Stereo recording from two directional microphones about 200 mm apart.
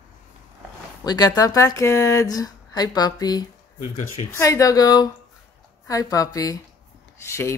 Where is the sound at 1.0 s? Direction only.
20° left (ahead or behind).